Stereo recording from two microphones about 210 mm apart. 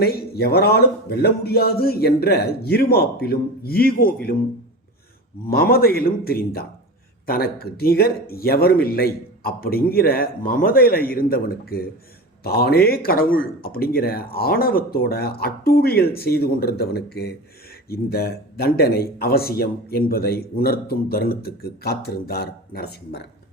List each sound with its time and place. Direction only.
0.0 s speech: 50° left (ahead or behind)
5.5 s speech: 45° left (ahead or behind)